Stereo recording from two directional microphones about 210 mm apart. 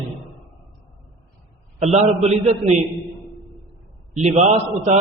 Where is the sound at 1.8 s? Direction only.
30° right (ahead or behind).